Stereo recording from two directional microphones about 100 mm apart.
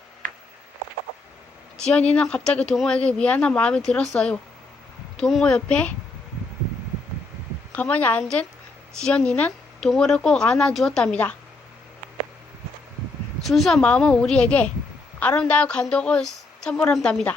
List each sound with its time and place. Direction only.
1.8 s a woman's voice: 10° left (ahead or behind)
7.7 s a woman's voice: 15° left (ahead or behind)
13.4 s a woman's voice: centre (ahead or behind)